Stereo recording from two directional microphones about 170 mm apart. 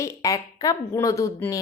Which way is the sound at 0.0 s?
20° left (ahead or behind).